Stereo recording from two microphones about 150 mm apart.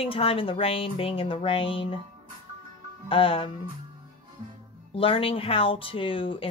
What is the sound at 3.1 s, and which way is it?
Speech, 35° left (ahead or behind).